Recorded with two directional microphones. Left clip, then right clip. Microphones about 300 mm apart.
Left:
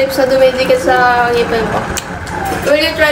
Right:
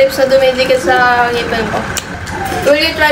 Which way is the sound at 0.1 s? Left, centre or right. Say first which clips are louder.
Even; centre.